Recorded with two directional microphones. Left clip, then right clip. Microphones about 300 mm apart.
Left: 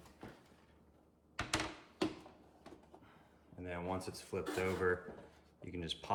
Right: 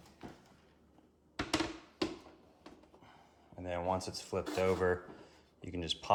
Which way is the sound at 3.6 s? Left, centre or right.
Right.